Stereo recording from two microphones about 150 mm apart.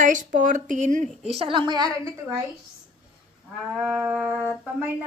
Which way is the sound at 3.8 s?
10° right (ahead or behind).